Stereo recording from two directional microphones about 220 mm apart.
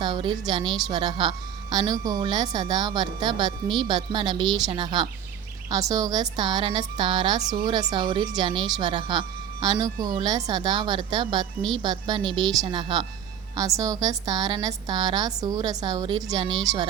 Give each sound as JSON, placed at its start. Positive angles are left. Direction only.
{"t": 0.0, "sound": "a woman's voice", "side_deg": -20}